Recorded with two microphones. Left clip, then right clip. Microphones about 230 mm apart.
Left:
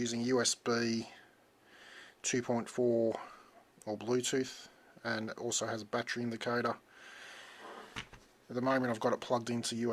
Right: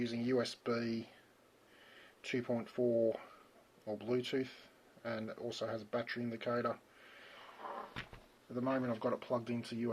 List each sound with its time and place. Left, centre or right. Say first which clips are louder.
0.0 s speech: left 4 dB; left
2.2 s speech: left 4 dB; left
8.5 s speech: left 5 dB; left